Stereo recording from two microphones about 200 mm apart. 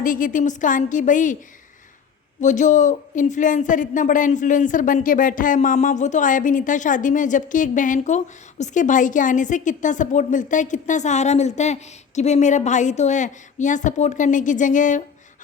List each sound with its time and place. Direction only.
0.0 s speech: 40° left (ahead or behind)
2.4 s speech: 40° left (ahead or behind)